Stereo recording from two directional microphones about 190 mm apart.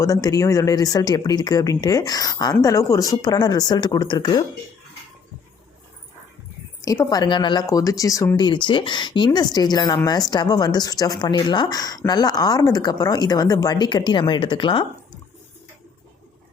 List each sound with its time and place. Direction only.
0.0 s speech: 20° left (ahead or behind)
6.8 s speech: 20° left (ahead or behind)